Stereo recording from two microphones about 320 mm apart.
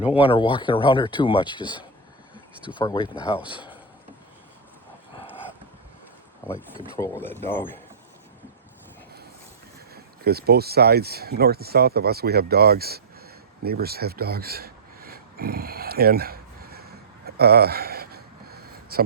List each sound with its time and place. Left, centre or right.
0.2 s speech: centre
6.9 s speech: centre
9.9 s speech: right
13.7 s a sound: right